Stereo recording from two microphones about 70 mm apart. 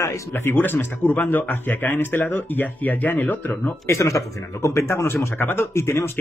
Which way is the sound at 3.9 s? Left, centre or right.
Left.